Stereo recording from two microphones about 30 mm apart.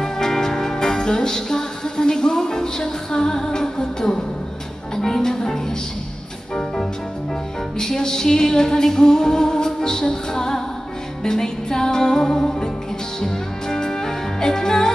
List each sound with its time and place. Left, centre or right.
0.0 s music: centre
7.8 s music: centre